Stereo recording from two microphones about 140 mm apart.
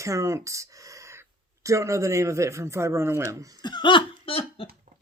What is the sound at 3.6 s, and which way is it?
Hiccup, 30° left (ahead or behind).